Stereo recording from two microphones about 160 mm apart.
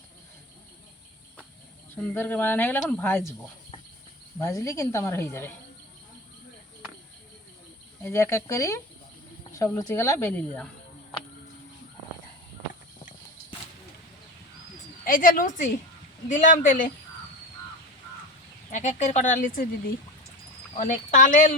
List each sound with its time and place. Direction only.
2.1 s cricket: 15° left (ahead or behind)
4.4 s cricket: 20° left (ahead or behind)
8.0 s speech: 15° left (ahead or behind)
9.6 s cricket: 20° left (ahead or behind)
15.0 s a woman's voice: 60° left (ahead or behind)
18.7 s speech: 50° left (ahead or behind)
20.7 s speech: 50° left (ahead or behind)